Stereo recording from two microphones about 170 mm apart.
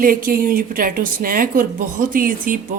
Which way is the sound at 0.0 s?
55° right (ahead or behind).